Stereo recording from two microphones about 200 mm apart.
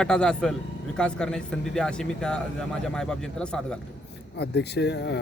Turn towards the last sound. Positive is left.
turn(degrees=60)  # may be behind; listen again after turning